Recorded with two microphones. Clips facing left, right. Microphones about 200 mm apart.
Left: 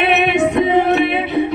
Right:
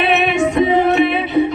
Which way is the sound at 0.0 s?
60° left (ahead or behind).